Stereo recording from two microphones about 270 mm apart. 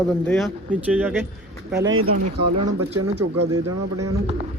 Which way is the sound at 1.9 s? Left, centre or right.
Right.